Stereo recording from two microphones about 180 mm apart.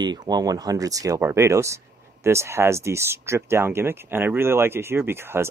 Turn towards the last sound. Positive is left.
turn(degrees=-15)  # may be behind; listen again after turning